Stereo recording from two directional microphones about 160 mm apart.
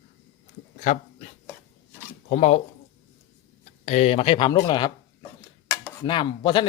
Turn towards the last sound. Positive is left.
turn(degrees=30)  # may be behind; listen again after turning